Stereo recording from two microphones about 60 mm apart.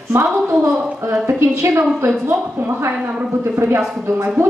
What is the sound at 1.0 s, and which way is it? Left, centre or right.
Speech, right.